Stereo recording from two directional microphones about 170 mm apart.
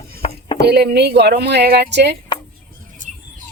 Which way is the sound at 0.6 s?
75° right (ahead or behind).